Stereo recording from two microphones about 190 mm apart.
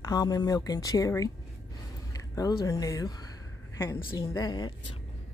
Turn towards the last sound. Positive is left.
turn(degrees=20)  # may be behind; listen again after turning